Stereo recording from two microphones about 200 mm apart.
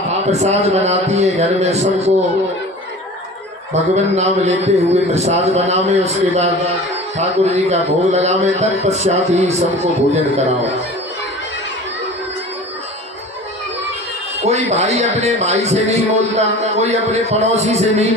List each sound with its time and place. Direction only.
0.1 s a man's voice: 30° right (ahead or behind)
3.9 s a man's voice: 35° right (ahead or behind)
14.4 s a man's voice: 35° right (ahead or behind)